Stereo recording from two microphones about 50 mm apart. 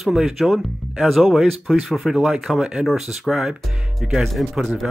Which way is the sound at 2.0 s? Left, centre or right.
Centre.